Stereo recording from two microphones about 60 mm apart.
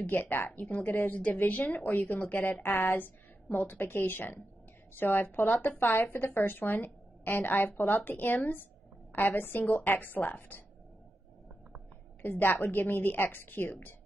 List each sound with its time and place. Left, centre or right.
0.0 s a woman's voice: left
12.2 s a woman's voice: left